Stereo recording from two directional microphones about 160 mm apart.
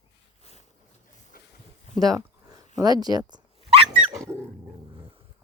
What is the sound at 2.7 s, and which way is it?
Speech, 25° right (ahead or behind).